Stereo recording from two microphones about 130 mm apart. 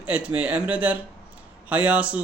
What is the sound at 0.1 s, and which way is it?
A man's voice, 10° right (ahead or behind).